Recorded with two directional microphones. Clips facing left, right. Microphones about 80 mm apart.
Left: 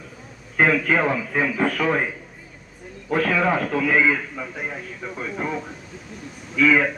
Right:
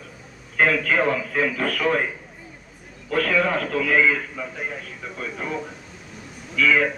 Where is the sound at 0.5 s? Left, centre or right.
Centre.